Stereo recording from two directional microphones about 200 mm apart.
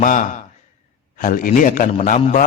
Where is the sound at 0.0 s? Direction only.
40° left (ahead or behind).